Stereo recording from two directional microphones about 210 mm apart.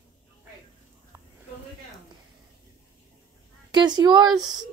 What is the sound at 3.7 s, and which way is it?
Speech, 20° right (ahead or behind).